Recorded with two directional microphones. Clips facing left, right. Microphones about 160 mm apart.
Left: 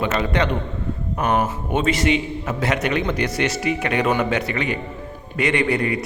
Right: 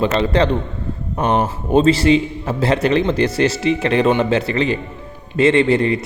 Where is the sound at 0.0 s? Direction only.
30° right (ahead or behind).